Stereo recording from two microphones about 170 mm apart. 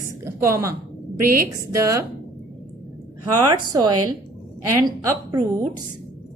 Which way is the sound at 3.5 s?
25° right (ahead or behind).